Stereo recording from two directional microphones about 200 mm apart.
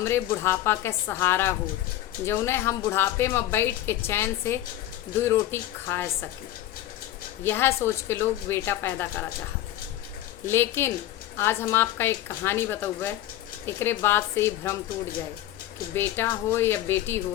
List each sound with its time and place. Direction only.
0.0 s speech: 10° left (ahead or behind)
7.4 s speech: 10° left (ahead or behind)
10.4 s speech: 10° left (ahead or behind)
16.0 s speech: 10° left (ahead or behind)